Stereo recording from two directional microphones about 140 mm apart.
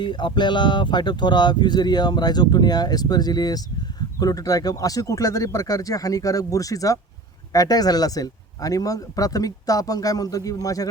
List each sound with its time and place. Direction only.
0.0 s speech: 30° left (ahead or behind)